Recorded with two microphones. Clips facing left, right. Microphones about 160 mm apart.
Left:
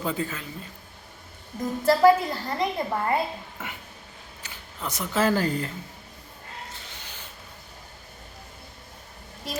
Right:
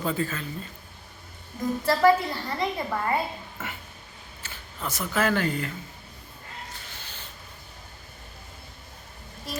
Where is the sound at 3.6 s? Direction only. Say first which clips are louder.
Right 2 dB; 15° left (ahead or behind).